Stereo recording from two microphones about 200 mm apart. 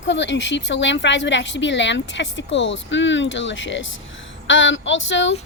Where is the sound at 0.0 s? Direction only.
65° left (ahead or behind).